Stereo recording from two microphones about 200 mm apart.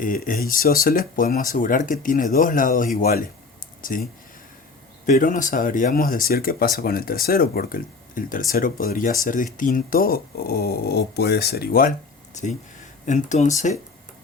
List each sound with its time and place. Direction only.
0.0 s speech: 45° left (ahead or behind)
13.1 s speech: 35° left (ahead or behind)